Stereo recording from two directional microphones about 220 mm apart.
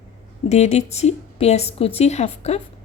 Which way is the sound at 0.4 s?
30° left (ahead or behind).